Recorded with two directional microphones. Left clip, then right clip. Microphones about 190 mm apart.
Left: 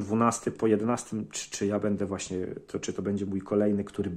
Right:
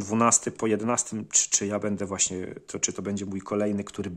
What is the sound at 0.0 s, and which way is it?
Speech, 30° right (ahead or behind).